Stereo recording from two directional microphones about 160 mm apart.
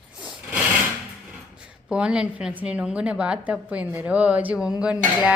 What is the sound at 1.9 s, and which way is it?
A woman's voice, 5° right (ahead or behind).